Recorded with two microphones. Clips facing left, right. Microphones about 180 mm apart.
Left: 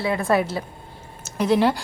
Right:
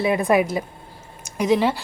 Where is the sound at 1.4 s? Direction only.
5° right (ahead or behind).